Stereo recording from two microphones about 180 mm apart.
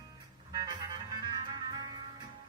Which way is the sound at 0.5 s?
25° right (ahead or behind).